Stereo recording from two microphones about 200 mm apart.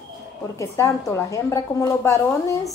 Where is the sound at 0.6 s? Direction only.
15° left (ahead or behind).